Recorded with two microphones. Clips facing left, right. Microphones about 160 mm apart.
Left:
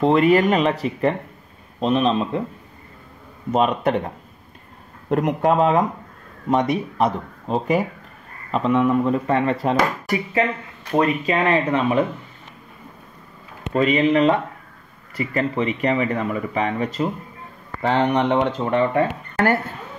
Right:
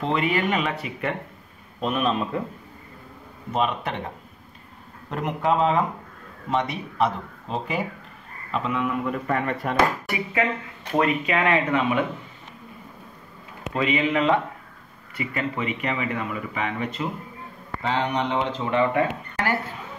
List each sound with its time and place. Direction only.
0.0 s speech: 40° left (ahead or behind)
3.5 s speech: 45° left (ahead or behind)
5.1 s speech: 50° left (ahead or behind); by 9.8 s 30° left (ahead or behind)
10.0 s speech: 40° left (ahead or behind)
13.7 s speech: 40° left (ahead or behind)
17.8 s speech: 55° left (ahead or behind)
18.6 s speech: 40° left (ahead or behind)